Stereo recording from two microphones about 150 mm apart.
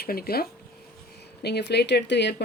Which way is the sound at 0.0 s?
85° left.